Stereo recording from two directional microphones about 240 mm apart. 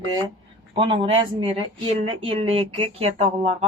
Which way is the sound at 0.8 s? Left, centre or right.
Right.